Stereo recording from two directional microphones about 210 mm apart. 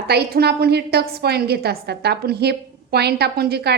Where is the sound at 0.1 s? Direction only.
50° right (ahead or behind).